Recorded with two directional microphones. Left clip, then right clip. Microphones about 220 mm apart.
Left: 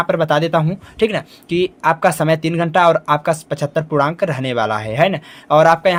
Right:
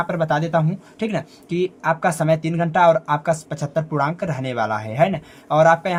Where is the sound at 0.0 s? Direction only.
25° left (ahead or behind).